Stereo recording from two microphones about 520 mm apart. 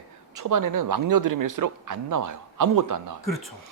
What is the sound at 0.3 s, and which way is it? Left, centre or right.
A man's voice, right.